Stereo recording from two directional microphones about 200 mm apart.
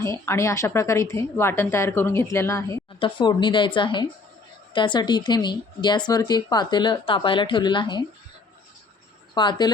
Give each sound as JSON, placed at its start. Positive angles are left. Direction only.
{"t": 0.3, "sound": "a woman's voice", "side_deg": 15}
{"t": 9.3, "sound": "a woman's voice", "side_deg": 20}